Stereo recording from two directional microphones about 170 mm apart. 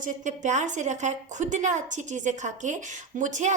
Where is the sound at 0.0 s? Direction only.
45° right (ahead or behind).